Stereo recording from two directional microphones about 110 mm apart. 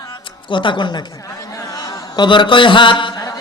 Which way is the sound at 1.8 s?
35° left (ahead or behind).